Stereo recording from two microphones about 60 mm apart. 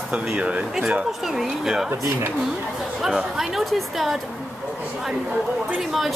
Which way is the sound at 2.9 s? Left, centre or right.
Centre.